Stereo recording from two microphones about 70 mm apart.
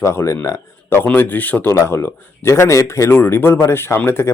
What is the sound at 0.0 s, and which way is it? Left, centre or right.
Speech, left.